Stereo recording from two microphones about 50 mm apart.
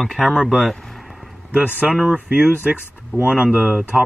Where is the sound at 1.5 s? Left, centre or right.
Right.